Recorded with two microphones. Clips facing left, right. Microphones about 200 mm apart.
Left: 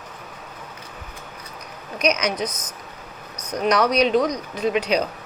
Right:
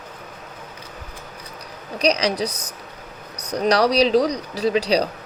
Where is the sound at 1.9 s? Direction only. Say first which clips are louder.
Right 2 dB; 30° right (ahead or behind).